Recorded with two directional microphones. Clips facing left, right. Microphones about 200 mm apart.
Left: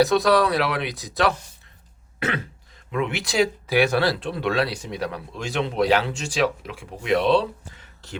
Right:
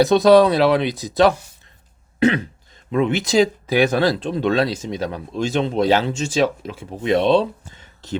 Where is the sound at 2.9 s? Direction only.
25° right (ahead or behind).